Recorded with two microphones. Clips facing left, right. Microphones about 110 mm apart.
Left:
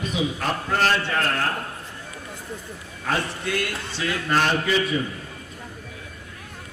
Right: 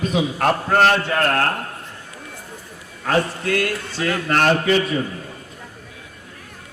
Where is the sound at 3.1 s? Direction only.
45° right (ahead or behind).